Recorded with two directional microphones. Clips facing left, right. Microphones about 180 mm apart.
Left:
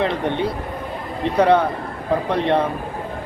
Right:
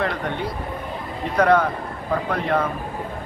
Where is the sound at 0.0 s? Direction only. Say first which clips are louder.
Left 4 dB; 20° left (ahead or behind).